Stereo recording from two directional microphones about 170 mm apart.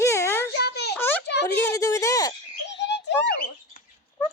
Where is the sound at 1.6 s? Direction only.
20° left (ahead or behind).